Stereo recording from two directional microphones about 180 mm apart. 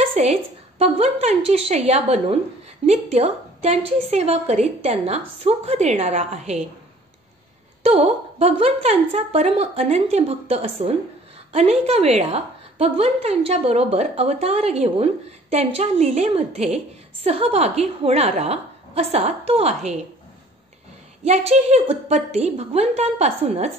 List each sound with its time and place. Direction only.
0.1 s a woman's voice: 35° right (ahead or behind)
7.8 s a woman's voice: 35° right (ahead or behind)
21.2 s a woman's voice: 35° right (ahead or behind)